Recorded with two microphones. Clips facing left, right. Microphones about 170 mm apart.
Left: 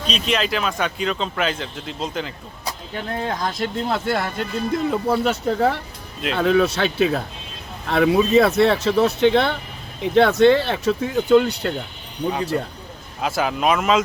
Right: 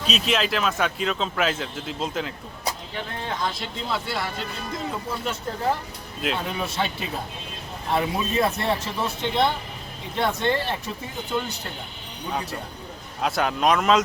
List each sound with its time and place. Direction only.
0.0 s speech: 5° right (ahead or behind)
3.2 s speech: 45° left (ahead or behind); by 11.7 s 65° left (ahead or behind)
12.3 s speech: centre (ahead or behind)